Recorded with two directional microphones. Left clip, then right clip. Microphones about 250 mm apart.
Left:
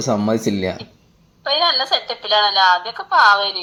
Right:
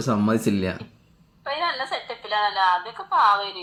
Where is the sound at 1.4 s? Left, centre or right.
Left.